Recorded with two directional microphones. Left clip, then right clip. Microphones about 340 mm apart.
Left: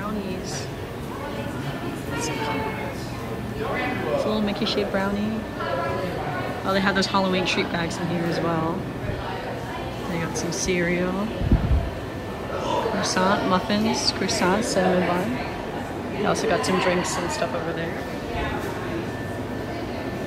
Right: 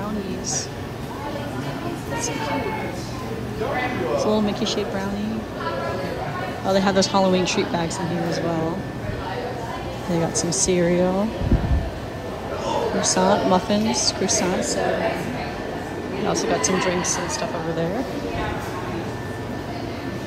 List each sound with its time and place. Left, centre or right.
4.3 s speech: centre
6.7 s speech: centre
10.5 s speech: centre
13.1 s speech: centre
16.3 s speech: centre